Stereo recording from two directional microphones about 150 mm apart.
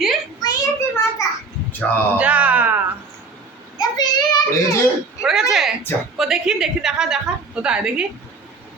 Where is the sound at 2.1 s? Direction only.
10° right (ahead or behind).